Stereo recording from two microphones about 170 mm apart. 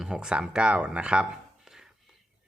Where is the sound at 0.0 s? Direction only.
5° right (ahead or behind).